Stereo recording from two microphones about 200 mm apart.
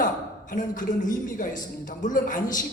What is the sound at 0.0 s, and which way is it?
A man's voice, 40° left (ahead or behind).